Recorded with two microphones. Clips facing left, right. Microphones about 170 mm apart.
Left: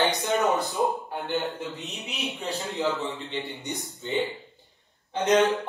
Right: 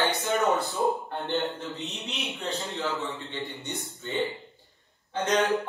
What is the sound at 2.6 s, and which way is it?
A man's voice, 20° left (ahead or behind).